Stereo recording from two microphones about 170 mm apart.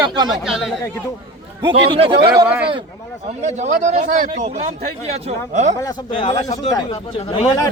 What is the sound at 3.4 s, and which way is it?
A man's voice, 45° right (ahead or behind).